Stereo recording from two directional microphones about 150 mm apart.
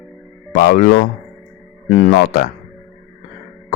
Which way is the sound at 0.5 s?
90° left.